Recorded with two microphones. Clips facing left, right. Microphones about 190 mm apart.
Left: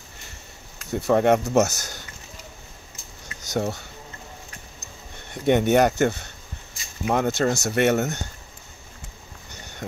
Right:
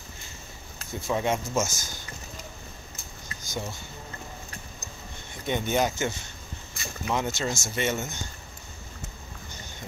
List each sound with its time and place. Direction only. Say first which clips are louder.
0.9 s speech: left 9 dB; 60° left (ahead or behind)
3.3 s speech: left 9 dB; 70° left (ahead or behind)
5.3 s speech: left 9 dB; 65° left (ahead or behind)
6.8 s a sound: right 7 dB; 60° right (ahead or behind)
7.1 s speech: left 7 dB; 60° left (ahead or behind)
9.5 s a sound: left 8 dB; 65° left (ahead or behind)